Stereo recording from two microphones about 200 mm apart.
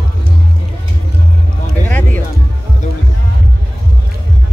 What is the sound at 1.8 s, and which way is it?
Music, 10° left (ahead or behind).